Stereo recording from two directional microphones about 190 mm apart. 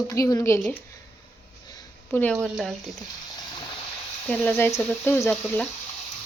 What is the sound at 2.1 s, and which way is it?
Speech, 10° left (ahead or behind).